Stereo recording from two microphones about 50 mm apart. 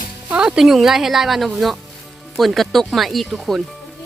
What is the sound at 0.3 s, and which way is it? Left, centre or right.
A woman's voice, centre.